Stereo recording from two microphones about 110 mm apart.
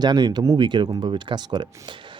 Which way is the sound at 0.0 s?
40° right (ahead or behind).